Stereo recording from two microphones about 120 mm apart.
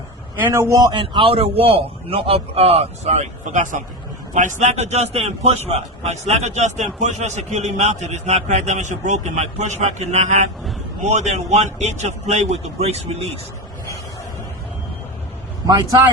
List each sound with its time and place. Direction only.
0.3 s a man's voice: 20° right (ahead or behind)
0.9 s a man's voice: 50° right (ahead or behind)
15.6 s speech: 30° right (ahead or behind)